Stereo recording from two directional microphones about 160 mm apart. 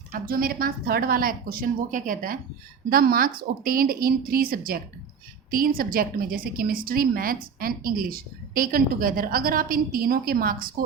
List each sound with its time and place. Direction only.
0.1 s a woman's voice: 65° right (ahead or behind)